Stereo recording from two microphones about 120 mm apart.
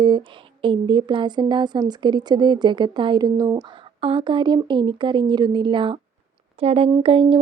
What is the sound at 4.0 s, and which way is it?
Speech, 45° right (ahead or behind).